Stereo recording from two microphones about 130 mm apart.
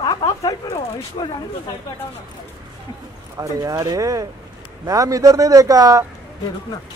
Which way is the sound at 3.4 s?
25° right (ahead or behind).